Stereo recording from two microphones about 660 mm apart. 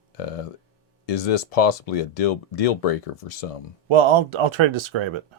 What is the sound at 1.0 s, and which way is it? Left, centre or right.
Speech, left.